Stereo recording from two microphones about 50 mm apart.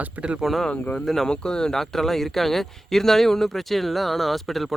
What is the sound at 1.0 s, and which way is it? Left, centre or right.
Speech, centre.